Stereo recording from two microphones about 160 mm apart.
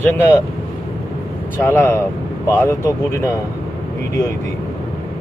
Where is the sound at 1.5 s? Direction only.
15° left (ahead or behind).